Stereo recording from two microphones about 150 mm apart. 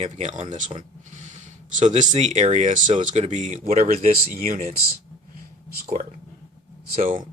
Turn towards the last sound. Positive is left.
turn(degrees=-55)  # may be behind; listen again after turning